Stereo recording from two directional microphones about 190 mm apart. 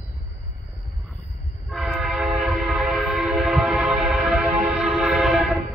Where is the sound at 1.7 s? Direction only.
Centre (ahead or behind).